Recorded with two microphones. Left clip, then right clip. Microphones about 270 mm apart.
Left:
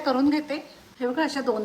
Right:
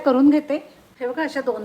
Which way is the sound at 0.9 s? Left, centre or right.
Centre.